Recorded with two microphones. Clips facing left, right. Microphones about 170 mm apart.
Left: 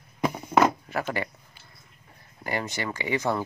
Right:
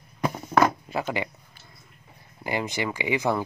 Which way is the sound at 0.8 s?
15° right (ahead or behind).